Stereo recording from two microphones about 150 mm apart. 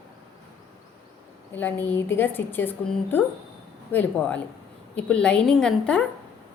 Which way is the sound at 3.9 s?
10° left (ahead or behind).